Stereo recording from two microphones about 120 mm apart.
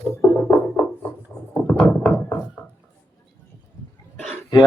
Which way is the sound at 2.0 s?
15° left (ahead or behind).